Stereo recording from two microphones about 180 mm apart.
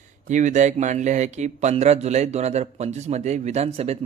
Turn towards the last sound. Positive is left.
turn(degrees=-35)  # may be behind; listen again after turning